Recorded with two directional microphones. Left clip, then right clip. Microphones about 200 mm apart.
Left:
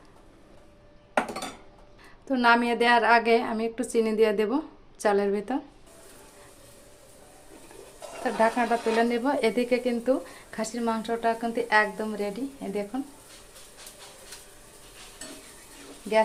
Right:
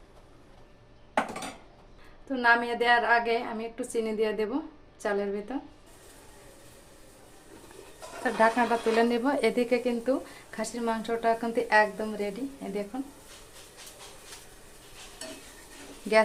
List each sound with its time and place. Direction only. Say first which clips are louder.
2.2 s a woman's voice: left 2 dB; 35° left (ahead or behind)
8.2 s speech: even; 5° left (ahead or behind)
12.1 s speech: left 2 dB; 15° left (ahead or behind)